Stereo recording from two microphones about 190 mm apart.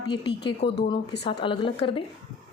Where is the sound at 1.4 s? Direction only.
25° left (ahead or behind).